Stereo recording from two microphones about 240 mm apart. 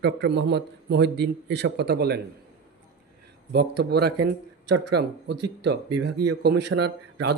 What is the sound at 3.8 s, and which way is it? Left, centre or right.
Speech, right.